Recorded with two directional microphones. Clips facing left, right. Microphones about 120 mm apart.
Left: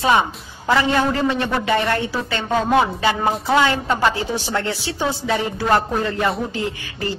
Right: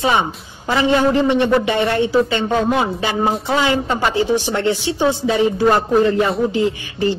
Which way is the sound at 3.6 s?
20° right (ahead or behind).